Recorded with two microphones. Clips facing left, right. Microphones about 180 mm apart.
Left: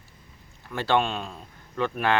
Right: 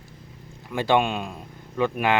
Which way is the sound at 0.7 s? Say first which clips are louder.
Right 3 dB; 15° right (ahead or behind).